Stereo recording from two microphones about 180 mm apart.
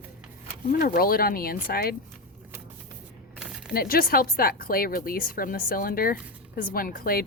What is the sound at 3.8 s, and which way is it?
A woman's voice, 55° left (ahead or behind).